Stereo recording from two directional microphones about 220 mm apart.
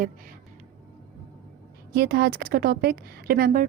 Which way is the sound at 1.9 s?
45° right (ahead or behind).